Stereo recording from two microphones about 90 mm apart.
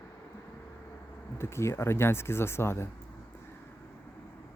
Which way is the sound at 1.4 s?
30° left (ahead or behind).